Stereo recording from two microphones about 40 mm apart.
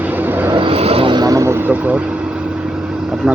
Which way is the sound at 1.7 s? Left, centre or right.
Right.